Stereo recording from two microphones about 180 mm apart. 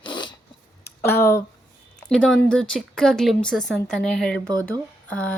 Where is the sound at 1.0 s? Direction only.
15° left (ahead or behind).